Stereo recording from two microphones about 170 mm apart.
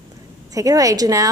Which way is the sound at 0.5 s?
20° right (ahead or behind).